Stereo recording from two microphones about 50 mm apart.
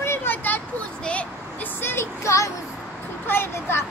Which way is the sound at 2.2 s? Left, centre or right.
Left.